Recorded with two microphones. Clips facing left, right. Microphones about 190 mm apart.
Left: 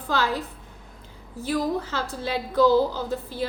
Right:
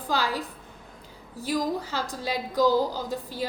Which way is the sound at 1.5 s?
15° right (ahead or behind).